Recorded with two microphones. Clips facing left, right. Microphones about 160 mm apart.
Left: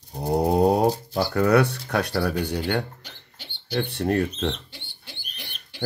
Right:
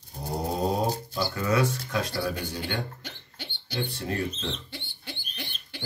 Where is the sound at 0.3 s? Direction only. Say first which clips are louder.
Left 9 dB; 65° left (ahead or behind).